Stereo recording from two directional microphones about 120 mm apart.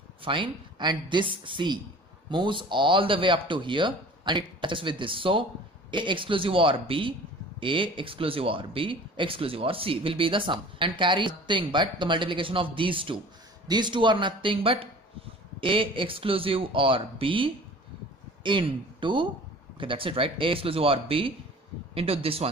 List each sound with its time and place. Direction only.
0.2 s speech: 45° right (ahead or behind)